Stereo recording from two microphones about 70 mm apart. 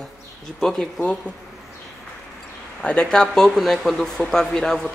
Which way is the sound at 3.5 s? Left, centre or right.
Centre.